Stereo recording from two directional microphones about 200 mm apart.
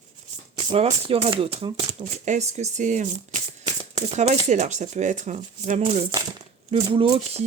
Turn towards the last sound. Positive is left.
turn(degrees=-25)  # may be behind; listen again after turning